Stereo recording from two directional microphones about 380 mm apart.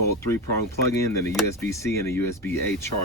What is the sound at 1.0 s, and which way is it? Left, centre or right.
Speech, centre.